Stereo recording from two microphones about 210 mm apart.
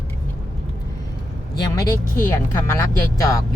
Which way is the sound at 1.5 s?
20° left (ahead or behind).